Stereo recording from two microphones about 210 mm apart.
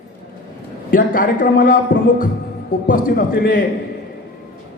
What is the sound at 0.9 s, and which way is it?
Speech, 40° left (ahead or behind).